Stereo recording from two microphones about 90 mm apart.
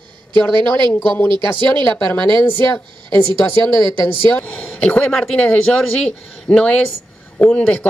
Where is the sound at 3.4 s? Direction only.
30° left (ahead or behind).